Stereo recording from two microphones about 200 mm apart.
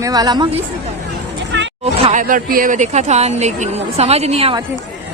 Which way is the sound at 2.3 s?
45° right (ahead or behind).